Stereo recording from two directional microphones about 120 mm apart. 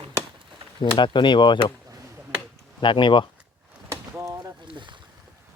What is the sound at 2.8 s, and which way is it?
Speech, 40° left (ahead or behind).